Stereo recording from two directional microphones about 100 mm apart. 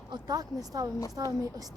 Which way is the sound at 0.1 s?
40° right (ahead or behind).